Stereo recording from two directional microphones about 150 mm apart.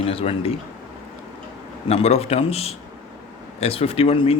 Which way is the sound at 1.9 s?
40° left (ahead or behind).